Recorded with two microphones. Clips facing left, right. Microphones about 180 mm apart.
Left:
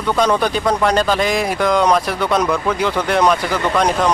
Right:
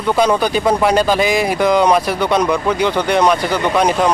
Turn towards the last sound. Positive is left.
turn(degrees=-5)  # may be behind; listen again after turning